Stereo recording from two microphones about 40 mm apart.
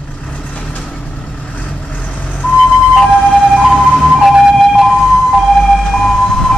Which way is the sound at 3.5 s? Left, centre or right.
Centre.